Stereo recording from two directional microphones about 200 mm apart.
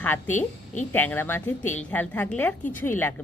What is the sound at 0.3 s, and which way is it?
Speech, 40° left (ahead or behind).